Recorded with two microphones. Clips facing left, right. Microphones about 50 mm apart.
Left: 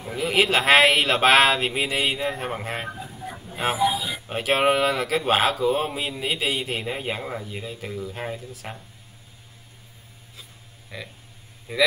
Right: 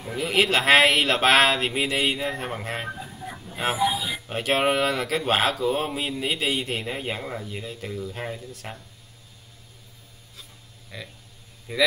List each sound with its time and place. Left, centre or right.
0.0 s speech: centre
10.9 s speech: centre